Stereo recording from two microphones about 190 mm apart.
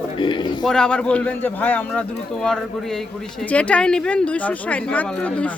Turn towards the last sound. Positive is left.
turn(degrees=5)  # may be behind; listen again after turning